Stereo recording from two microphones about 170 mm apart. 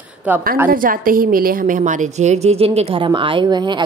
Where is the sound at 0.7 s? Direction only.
55° right (ahead or behind).